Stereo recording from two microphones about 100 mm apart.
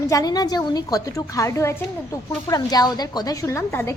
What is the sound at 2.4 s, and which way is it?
Speech, 40° left (ahead or behind).